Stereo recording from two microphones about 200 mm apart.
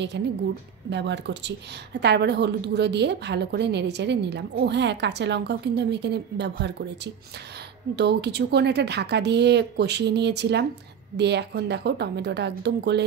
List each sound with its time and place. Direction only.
0.2 s a woman's voice: 60° right (ahead or behind)
7.9 s a woman's voice: 55° right (ahead or behind)